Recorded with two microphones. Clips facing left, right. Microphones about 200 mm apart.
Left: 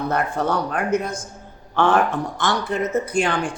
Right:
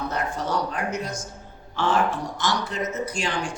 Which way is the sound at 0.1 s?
55° left (ahead or behind).